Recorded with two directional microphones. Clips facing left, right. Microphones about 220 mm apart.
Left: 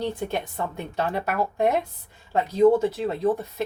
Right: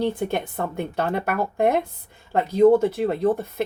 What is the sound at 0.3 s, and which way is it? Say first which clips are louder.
A woman's voice: right 3 dB; 55° right (ahead or behind).